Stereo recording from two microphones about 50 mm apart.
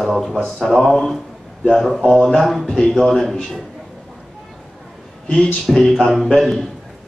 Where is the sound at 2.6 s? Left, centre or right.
Centre.